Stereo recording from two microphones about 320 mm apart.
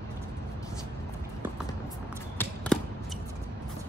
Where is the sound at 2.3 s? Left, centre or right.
Centre.